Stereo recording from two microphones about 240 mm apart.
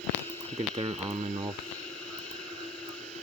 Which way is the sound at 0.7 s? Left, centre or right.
Right.